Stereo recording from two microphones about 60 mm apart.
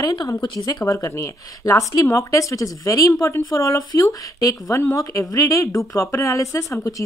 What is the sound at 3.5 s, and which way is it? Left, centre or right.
Speech, left.